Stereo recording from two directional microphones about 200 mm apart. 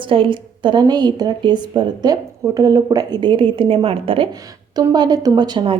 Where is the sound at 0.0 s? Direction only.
25° right (ahead or behind).